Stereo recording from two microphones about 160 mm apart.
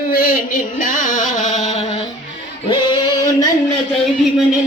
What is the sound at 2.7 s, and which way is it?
Female singing, 25° left (ahead or behind).